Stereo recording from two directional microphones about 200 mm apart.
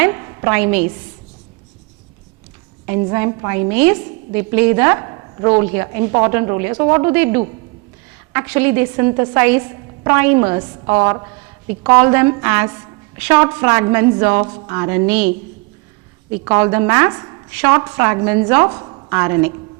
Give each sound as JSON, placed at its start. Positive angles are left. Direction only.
{"t": 0.0, "sound": "speech", "side_deg": -15}
{"t": 3.0, "sound": "a woman's voice", "side_deg": -20}
{"t": 16.4, "sound": "a woman's voice", "side_deg": -15}